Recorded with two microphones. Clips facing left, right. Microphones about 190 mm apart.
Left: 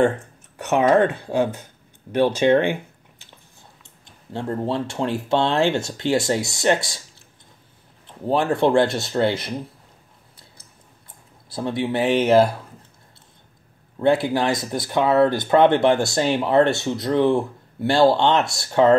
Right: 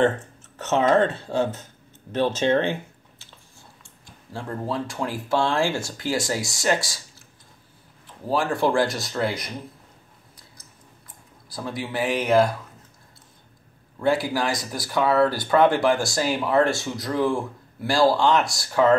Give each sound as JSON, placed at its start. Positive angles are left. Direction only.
{"t": 0.6, "sound": "speech", "side_deg": 15}
{"t": 8.3, "sound": "speech", "side_deg": 25}
{"t": 11.5, "sound": "speech", "side_deg": 25}
{"t": 13.9, "sound": "speech", "side_deg": 25}